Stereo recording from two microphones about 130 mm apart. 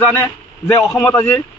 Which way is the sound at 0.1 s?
15° left (ahead or behind).